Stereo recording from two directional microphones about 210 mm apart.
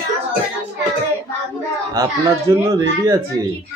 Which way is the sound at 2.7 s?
15° right (ahead or behind).